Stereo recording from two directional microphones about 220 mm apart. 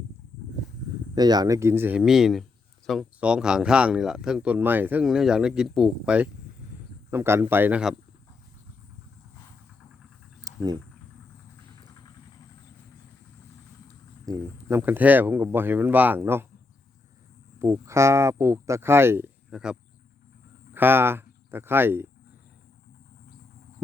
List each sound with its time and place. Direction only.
1.1 s speech: 20° right (ahead or behind)
10.4 s a sound: 20° right (ahead or behind)
14.3 s speech: 15° right (ahead or behind)
17.6 s speech: 10° right (ahead or behind)
20.7 s speech: 10° right (ahead or behind)